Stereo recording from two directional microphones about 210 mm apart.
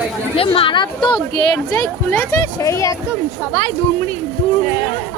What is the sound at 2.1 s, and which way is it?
Speech, 10° left (ahead or behind).